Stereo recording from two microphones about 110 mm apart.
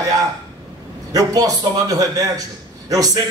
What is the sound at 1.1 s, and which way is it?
A man's voice, 35° right (ahead or behind).